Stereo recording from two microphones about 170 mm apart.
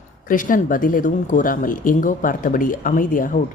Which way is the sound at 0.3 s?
50° left (ahead or behind).